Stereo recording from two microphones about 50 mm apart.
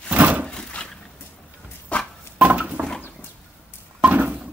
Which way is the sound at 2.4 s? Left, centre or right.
Right.